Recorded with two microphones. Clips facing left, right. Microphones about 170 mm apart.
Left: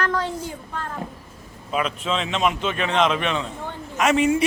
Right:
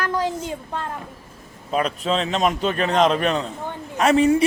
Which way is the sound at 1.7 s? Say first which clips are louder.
Right 3 dB; 40° right (ahead or behind).